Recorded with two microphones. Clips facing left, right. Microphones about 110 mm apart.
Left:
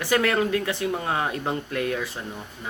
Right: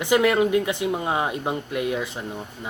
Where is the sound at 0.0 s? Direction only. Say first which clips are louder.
Right 3 dB; 15° right (ahead or behind).